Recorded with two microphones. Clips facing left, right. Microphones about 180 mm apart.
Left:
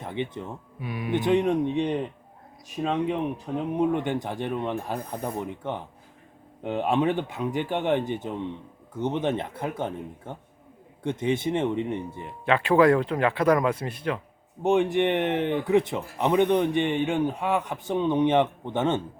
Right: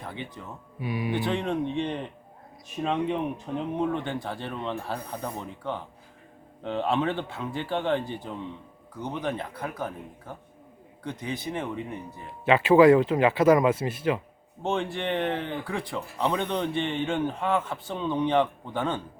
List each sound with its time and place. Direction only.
0.0 s speech: 20° left (ahead or behind)
0.8 s speech: centre (ahead or behind)
1.1 s speech: 20° left (ahead or behind)
3.8 s speech: 15° left (ahead or behind)
12.5 s speech: 5° right (ahead or behind)
14.6 s speech: 15° left (ahead or behind)